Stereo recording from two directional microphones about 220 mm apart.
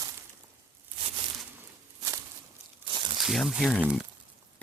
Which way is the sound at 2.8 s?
20° right (ahead or behind).